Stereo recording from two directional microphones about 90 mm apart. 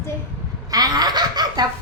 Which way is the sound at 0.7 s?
45° right (ahead or behind).